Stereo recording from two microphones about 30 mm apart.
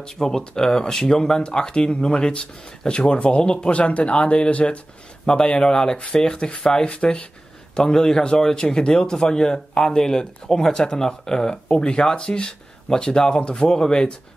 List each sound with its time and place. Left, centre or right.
0.0 s speech: left
3.1 s speech: left
5.2 s speech: left
6.9 s speech: left
7.9 s speech: left